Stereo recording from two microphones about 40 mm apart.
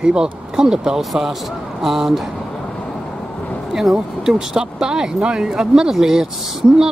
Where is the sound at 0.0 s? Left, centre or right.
Centre.